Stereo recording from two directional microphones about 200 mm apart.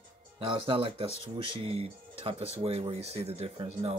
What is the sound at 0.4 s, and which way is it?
Speech, 25° right (ahead or behind).